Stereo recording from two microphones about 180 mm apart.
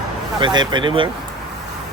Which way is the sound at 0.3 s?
25° right (ahead or behind).